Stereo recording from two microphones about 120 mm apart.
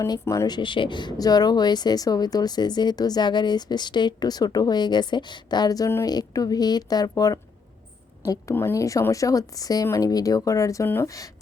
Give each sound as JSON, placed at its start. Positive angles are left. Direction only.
{"t": 0.1, "sound": "speech", "side_deg": 30}
{"t": 8.5, "sound": "speech", "side_deg": 20}